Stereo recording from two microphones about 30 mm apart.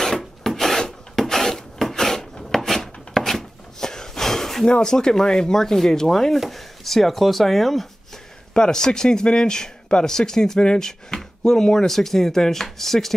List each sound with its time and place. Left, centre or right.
0.0 s filing: centre
4.6 s speech: left
4.9 s speech: centre
8.5 s speech: left